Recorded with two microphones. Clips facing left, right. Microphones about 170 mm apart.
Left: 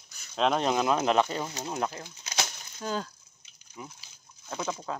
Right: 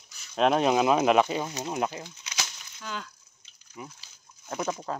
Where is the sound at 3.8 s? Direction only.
5° right (ahead or behind).